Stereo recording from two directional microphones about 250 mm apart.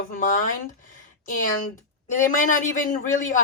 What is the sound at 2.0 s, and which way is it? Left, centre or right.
Speech, left.